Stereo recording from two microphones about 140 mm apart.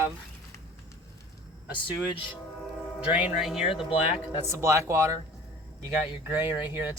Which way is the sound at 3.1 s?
5° right (ahead or behind).